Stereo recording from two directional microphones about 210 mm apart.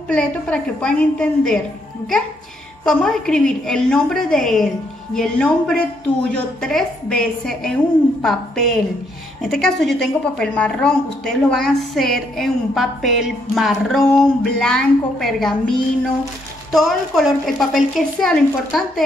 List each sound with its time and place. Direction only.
0.1 s a woman's voice: 5° left (ahead or behind)
2.8 s a woman's voice: centre (ahead or behind)